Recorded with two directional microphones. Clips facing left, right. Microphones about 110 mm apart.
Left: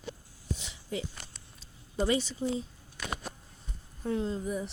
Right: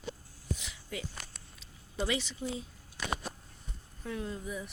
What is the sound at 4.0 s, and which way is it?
Speech, 30° left (ahead or behind).